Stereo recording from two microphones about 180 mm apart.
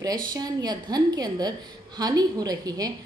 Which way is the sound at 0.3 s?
20° right (ahead or behind).